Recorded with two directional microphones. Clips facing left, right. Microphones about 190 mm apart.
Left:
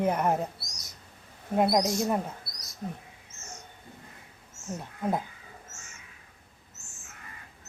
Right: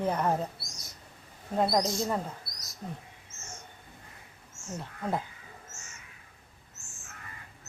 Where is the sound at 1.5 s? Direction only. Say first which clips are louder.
Left 3 dB; 15° left (ahead or behind).